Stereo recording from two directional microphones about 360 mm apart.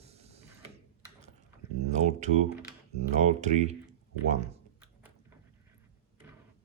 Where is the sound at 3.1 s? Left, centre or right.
Centre.